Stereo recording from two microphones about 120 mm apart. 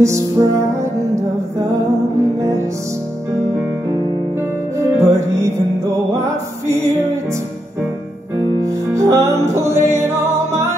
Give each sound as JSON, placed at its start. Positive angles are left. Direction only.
{"t": 0.0, "sound": "music", "side_deg": -25}
{"t": 4.7, "sound": "music", "side_deg": -25}
{"t": 8.6, "sound": "music", "side_deg": -25}